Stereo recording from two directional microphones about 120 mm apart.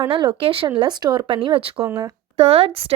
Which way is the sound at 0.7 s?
35° right (ahead or behind).